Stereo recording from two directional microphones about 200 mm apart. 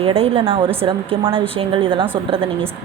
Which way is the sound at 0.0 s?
30° right (ahead or behind).